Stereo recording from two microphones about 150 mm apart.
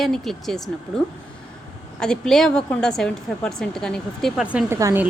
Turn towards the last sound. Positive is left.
turn(degrees=-20)  # may be behind; listen again after turning